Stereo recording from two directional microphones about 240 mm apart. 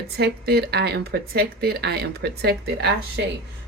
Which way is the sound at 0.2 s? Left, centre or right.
Right.